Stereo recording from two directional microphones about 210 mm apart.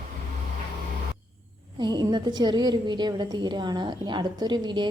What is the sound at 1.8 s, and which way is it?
A woman's voice, 20° right (ahead or behind).